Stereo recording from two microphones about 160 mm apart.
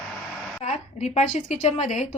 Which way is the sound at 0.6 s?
45° left (ahead or behind).